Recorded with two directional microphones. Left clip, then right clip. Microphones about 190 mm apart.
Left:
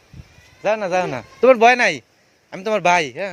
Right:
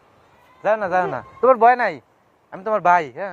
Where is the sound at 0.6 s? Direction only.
45° left (ahead or behind).